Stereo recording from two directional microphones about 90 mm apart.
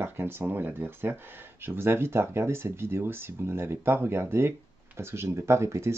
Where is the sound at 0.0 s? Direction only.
25° right (ahead or behind).